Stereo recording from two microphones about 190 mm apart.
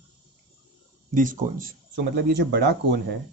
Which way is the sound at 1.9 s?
65° right (ahead or behind).